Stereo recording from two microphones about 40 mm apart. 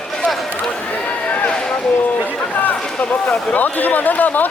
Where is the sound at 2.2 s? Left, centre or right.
Left.